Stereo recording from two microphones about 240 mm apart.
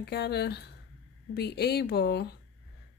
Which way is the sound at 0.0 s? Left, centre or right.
Left.